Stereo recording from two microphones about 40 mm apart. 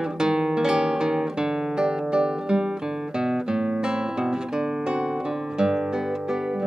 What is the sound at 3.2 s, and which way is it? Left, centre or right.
Music, centre.